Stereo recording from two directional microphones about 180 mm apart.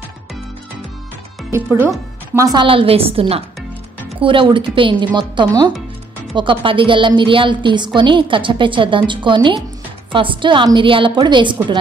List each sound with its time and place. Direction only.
1.5 s a woman's voice: 15° right (ahead or behind)